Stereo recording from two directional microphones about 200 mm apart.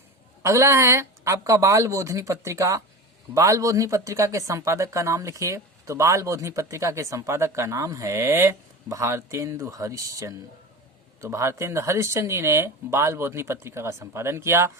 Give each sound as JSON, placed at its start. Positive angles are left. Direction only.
{"t": 0.4, "sound": "speech", "side_deg": -15}